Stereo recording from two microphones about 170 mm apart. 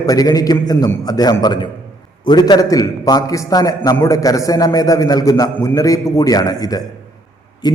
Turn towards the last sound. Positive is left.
turn(degrees=25)  # may be behind; listen again after turning